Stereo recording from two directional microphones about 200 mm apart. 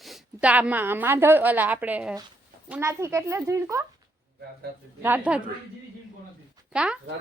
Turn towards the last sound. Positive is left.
turn(degrees=-5)  # may be behind; listen again after turning